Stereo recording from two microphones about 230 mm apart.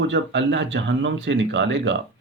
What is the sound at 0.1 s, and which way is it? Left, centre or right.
Speech, right.